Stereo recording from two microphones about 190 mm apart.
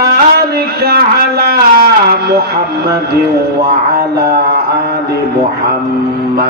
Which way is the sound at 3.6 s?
55° right (ahead or behind).